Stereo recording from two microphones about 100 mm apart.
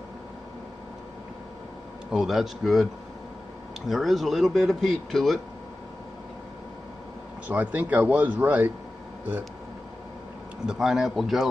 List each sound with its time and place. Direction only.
2.0 s speech: centre (ahead or behind)
7.4 s speech: 15° right (ahead or behind)
10.7 s speech: 5° right (ahead or behind)